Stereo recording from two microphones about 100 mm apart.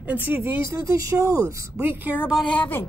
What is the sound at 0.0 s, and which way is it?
Speech, 15° right (ahead or behind).